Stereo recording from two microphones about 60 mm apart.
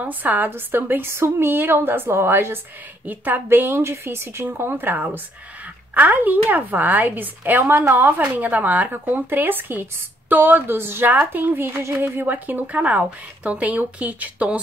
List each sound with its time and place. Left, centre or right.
0.0 s a woman's voice: right
3.1 s a woman's voice: right
8.2 s speech: right